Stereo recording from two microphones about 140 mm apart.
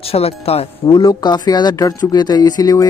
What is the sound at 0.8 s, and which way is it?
Speech, 30° left (ahead or behind).